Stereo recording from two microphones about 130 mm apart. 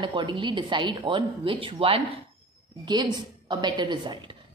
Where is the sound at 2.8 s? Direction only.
35° right (ahead or behind).